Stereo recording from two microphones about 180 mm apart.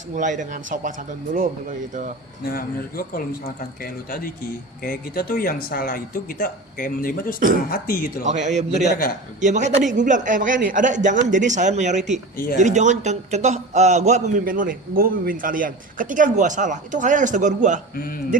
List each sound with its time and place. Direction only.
0.1 s a man's voice: 45° right (ahead or behind)
2.4 s speech: 55° left (ahead or behind)
8.2 s a man's voice: 40° right (ahead or behind)
17.9 s speech: 50° left (ahead or behind)